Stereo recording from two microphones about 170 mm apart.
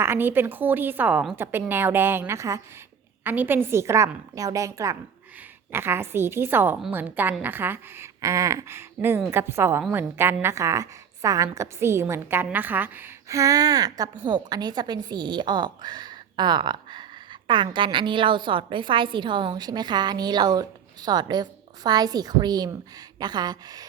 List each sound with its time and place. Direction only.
0.0 s a woman's voice: 15° right (ahead or behind)